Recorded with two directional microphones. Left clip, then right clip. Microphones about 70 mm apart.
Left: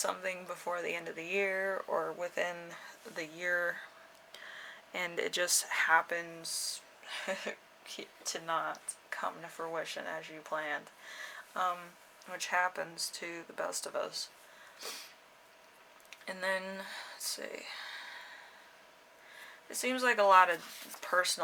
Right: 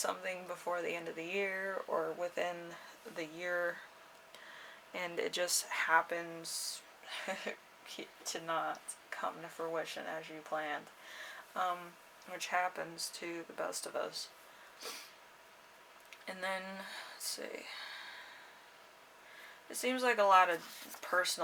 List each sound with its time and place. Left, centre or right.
0.0 s speech: left
14.8 s a sound: left
16.0 s speech: left
19.7 s speech: left
20.6 s speech: centre
21.0 s speech: left